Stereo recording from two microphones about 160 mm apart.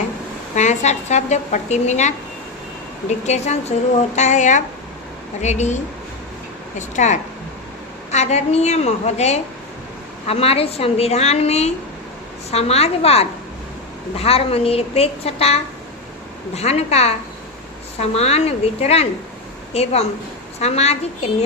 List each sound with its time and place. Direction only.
0.5 s a woman's voice: 45° left (ahead or behind)
16.6 s a woman's voice: 40° left (ahead or behind)